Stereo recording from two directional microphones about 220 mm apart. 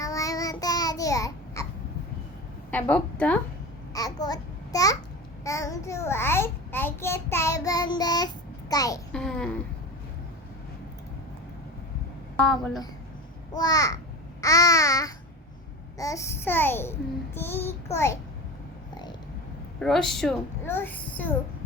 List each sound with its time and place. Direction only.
0.0 s child singing: 15° left (ahead or behind)
2.6 s a woman's voice: 10° left (ahead or behind)
3.9 s babbling: 15° left (ahead or behind)
5.5 s a child's voice: 15° left (ahead or behind)
9.1 s a child's voice: 5° left (ahead or behind)
12.4 s a child's voice: 5° left (ahead or behind)
13.5 s a child's voice: 15° left (ahead or behind)
19.8 s a child's voice: centre (ahead or behind)